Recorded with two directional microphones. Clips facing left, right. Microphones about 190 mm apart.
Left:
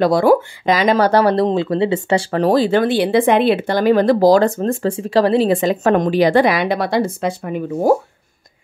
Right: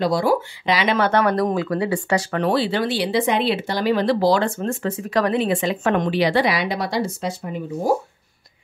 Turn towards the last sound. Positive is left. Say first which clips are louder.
# left 6 dB
turn(degrees=55)  # may be behind; listen again after turning